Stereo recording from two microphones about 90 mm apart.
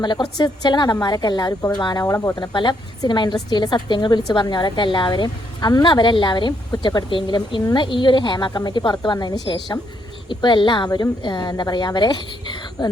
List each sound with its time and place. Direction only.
0.0 s a woman's voice: 55° left (ahead or behind)
2.0 s speech: 35° left (ahead or behind)
2.4 s a woman's voice: 60° left (ahead or behind)
7.6 s a woman's voice: 50° left (ahead or behind)
7.9 s a woman's voice: 65° left (ahead or behind)